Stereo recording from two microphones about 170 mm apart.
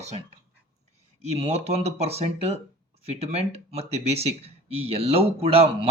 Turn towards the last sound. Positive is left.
turn(degrees=-35)  # may be behind; listen again after turning